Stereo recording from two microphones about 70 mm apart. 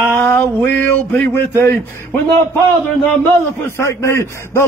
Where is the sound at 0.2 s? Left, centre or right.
Left.